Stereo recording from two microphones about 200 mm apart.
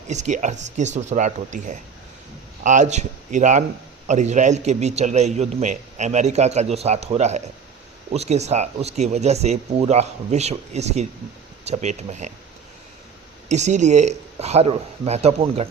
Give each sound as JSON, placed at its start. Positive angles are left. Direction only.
{"t": 0.1, "sound": "a man's voice", "side_deg": -35}
{"t": 13.5, "sound": "a man's voice", "side_deg": -35}